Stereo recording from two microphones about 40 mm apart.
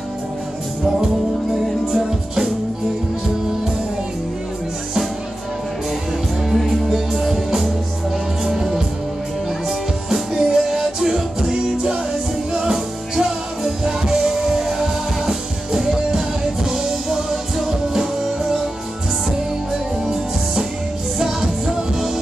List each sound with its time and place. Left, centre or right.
0.8 s music: centre
6.5 s music: centre
21.2 s music: centre